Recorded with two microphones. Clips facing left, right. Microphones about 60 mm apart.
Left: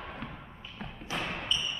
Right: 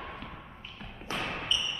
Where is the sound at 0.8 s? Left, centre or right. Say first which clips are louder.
Left 5 dB; centre.